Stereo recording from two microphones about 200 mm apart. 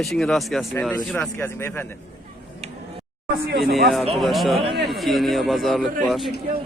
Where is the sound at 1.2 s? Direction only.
10° left (ahead or behind).